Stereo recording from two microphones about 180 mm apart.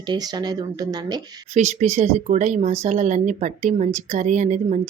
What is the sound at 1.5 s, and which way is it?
Speech, 40° right (ahead or behind).